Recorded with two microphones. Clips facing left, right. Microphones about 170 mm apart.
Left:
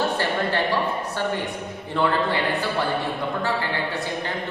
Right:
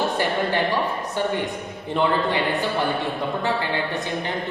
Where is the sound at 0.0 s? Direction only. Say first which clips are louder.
Right 1 dB; 15° right (ahead or behind).